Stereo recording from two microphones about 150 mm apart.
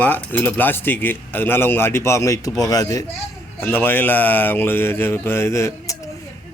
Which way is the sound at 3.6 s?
15° left (ahead or behind).